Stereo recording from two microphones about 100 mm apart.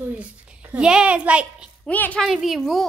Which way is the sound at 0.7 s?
10° right (ahead or behind).